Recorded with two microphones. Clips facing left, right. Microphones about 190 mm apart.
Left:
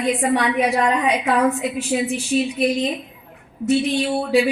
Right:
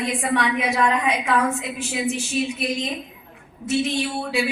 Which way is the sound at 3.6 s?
35° left (ahead or behind).